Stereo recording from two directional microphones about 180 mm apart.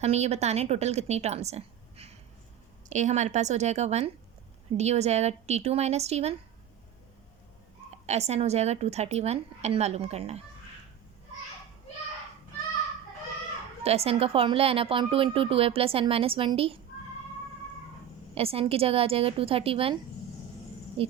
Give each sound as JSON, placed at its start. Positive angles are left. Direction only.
{"t": 0.0, "sound": "a woman's voice", "side_deg": -35}
{"t": 8.0, "sound": "a woman's voice", "side_deg": -35}
{"t": 13.8, "sound": "a woman's voice", "side_deg": -35}
{"t": 18.3, "sound": "a woman's voice", "side_deg": -30}
{"t": 21.0, "sound": "a woman's voice", "side_deg": -30}